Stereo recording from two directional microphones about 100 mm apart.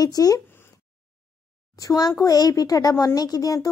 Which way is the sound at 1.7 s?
40° left (ahead or behind).